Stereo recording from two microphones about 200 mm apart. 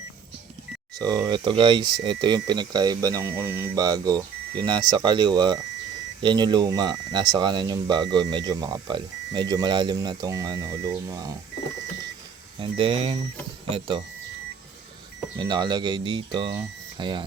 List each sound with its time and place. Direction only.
0.9 s speech: 20° right (ahead or behind)
12.5 s speech: 25° right (ahead or behind)
15.4 s speech: 25° right (ahead or behind)